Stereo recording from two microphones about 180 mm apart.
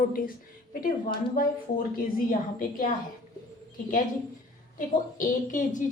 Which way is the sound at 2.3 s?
50° left (ahead or behind).